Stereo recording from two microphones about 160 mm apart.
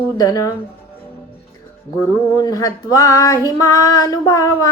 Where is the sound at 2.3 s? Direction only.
20° left (ahead or behind).